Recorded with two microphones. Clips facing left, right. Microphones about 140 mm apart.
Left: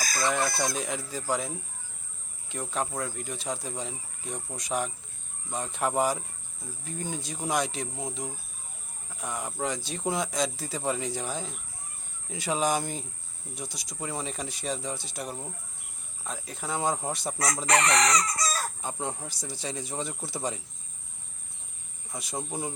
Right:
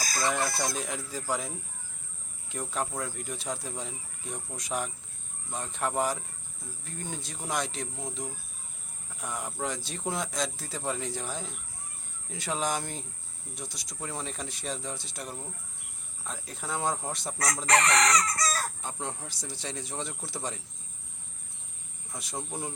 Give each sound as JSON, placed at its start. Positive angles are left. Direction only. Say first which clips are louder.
{"t": 0.2, "sound": "speech", "louder": "left 2 dB", "side_deg": -10}
{"t": 9.2, "sound": "speech", "louder": "left 2 dB", "side_deg": 0}
{"t": 17.3, "sound": "chicken", "louder": "even", "side_deg": 15}
{"t": 18.8, "sound": "speech", "louder": "left 3 dB", "side_deg": 5}
{"t": 22.1, "sound": "speech", "louder": "left 3 dB", "side_deg": 0}